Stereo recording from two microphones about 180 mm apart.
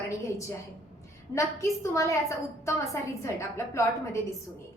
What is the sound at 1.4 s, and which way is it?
A woman's voice, 15° left (ahead or behind).